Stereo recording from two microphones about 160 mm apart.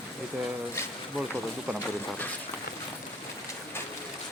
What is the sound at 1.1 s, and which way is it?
Speech, centre (ahead or behind).